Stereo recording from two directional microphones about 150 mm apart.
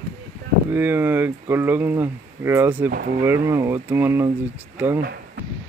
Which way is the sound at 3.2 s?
15° right (ahead or behind).